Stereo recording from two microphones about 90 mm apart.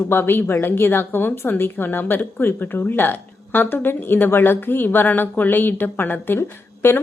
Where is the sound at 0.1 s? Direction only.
25° left (ahead or behind).